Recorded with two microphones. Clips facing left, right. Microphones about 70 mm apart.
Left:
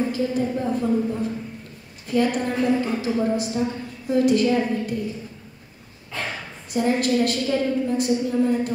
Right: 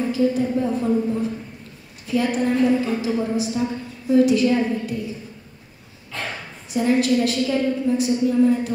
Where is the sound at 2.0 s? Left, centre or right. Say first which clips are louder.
Right 1 dB; left.